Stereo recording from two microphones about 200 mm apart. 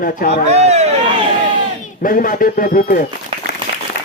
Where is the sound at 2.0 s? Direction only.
45° left (ahead or behind).